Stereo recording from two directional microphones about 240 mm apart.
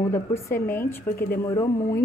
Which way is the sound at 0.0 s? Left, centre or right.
Centre.